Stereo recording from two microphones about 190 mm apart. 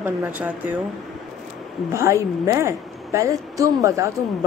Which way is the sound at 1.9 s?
15° right (ahead or behind).